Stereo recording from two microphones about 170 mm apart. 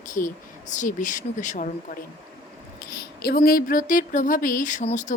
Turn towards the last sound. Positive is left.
turn(degrees=45)  # may be behind; listen again after turning